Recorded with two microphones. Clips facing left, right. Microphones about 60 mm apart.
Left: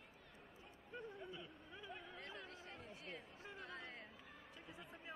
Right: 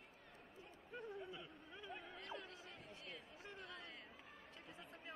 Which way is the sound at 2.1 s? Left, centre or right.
Left.